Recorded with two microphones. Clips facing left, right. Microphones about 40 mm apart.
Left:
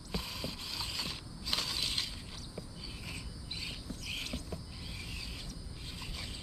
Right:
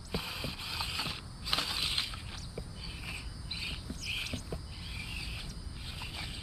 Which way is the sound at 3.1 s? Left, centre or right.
Centre.